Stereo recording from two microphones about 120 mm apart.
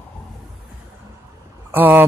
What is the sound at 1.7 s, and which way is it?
Speech, 15° right (ahead or behind).